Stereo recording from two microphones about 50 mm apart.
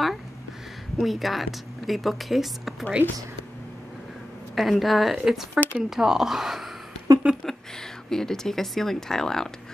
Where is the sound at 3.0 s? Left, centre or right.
Left.